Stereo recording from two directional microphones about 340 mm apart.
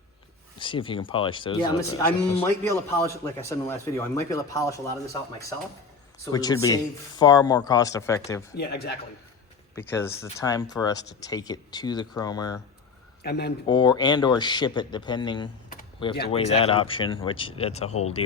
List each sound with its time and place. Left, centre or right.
0.6 s a man's voice: centre
8.5 s speech: left
9.7 s a man's voice: centre
13.2 s speech: left
13.7 s a man's voice: centre
15.7 s computer keyboard: centre
16.3 s a man's voice: centre